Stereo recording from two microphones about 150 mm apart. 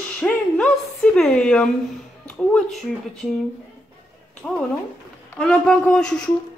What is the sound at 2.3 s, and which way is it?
Speech, 5° left (ahead or behind).